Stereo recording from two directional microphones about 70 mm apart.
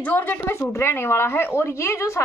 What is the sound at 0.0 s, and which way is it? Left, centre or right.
A woman's voice, left.